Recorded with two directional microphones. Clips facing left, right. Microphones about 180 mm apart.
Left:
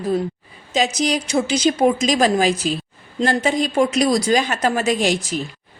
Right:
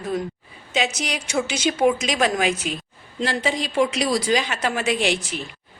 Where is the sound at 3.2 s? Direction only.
45° left (ahead or behind).